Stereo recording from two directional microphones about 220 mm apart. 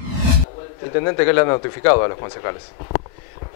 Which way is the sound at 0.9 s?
20° left (ahead or behind).